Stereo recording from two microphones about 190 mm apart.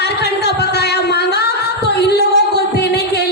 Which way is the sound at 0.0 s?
60° left (ahead or behind).